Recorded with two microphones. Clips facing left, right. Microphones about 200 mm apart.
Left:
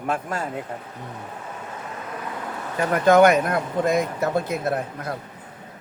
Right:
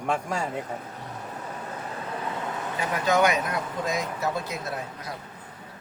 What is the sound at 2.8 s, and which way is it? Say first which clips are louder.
A man's voice: left 8 dB; 55° left (ahead or behind).